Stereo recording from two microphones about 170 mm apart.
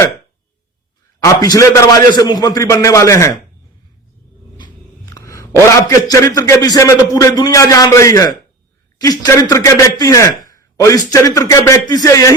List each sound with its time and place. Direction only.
1.2 s a man's voice: 20° left (ahead or behind)
4.5 s a sound: 25° left (ahead or behind)
5.9 s a man's voice: 20° left (ahead or behind)